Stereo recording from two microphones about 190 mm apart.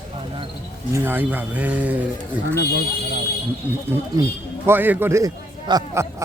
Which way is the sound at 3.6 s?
10° right (ahead or behind).